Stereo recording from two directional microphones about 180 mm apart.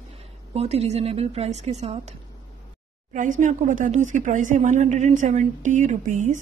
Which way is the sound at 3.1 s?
45° right (ahead or behind).